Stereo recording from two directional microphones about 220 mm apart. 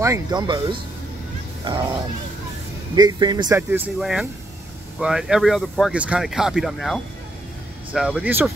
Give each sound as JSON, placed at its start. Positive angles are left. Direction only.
{"t": 0.0, "sound": "speech", "side_deg": -15}